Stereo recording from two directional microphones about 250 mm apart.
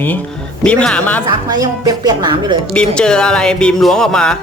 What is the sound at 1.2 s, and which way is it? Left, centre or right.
Speech, centre.